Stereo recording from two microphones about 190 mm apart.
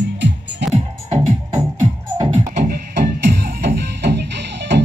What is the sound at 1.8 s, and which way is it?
Music, 20° right (ahead or behind).